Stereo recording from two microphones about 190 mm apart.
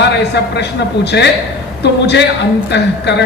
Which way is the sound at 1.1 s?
65° left (ahead or behind).